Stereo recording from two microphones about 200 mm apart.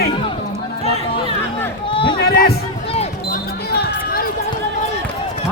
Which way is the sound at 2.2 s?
50° left (ahead or behind).